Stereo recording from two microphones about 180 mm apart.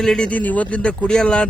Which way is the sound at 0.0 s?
5° left (ahead or behind).